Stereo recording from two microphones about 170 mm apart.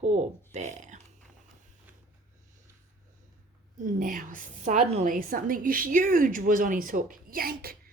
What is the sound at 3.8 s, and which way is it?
A woman's voice, 55° right (ahead or behind).